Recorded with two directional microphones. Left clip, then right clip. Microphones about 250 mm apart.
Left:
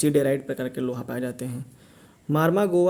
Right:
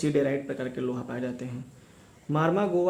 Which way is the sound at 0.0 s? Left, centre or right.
Left.